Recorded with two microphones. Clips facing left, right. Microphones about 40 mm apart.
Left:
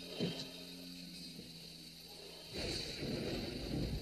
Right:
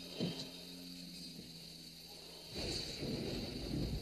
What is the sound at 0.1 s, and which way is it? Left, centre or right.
Vehicle, centre.